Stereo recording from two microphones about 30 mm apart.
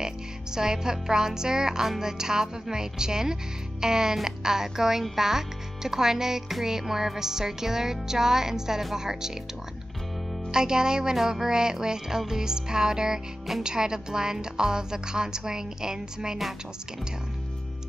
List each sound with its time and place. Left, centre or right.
0.6 s a woman's voice: right
3.8 s music: centre
10.5 s a woman's voice: right